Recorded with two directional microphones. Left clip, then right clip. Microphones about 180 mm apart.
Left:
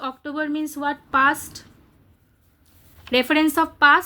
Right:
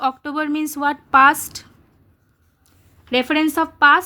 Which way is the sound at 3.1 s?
20° right (ahead or behind).